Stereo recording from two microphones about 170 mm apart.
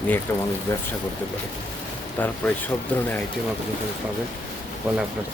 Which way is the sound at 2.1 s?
10° left (ahead or behind).